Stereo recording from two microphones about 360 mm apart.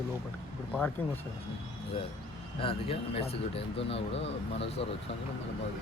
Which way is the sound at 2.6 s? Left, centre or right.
Centre.